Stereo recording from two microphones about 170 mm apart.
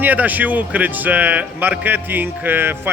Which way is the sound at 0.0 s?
10° right (ahead or behind).